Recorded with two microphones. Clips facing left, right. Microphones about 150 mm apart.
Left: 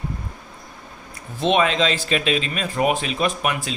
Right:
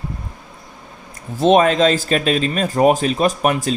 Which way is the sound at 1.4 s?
40° right (ahead or behind).